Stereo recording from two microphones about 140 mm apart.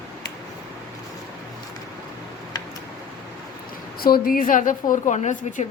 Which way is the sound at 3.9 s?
90° left.